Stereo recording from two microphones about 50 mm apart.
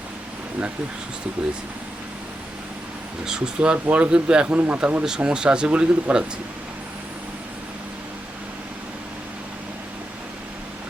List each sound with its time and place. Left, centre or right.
3.2 s speech: centre
3.8 s speech: right
4.1 s speech: centre
4.4 s speech: right
5.0 s speech: centre